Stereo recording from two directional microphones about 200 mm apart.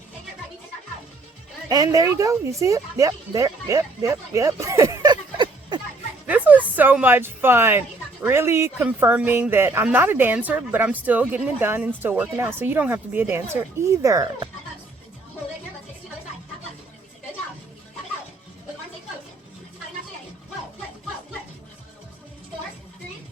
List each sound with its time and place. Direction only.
1.7 s speech: 15° right (ahead or behind)
6.2 s a woman's voice: 10° right (ahead or behind)